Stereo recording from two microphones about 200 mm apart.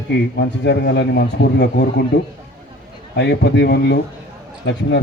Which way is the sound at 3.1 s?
60° left (ahead or behind).